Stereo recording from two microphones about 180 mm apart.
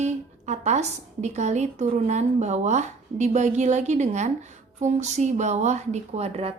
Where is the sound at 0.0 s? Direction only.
40° right (ahead or behind).